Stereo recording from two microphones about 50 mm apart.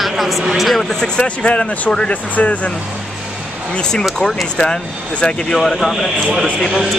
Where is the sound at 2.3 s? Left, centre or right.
Left.